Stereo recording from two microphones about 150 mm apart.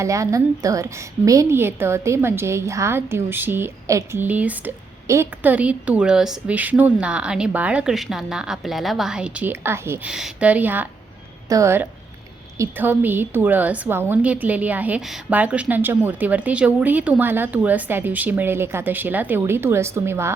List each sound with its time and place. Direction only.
0.0 s a woman's voice: 20° right (ahead or behind)
10.1 s a woman's voice: 5° right (ahead or behind)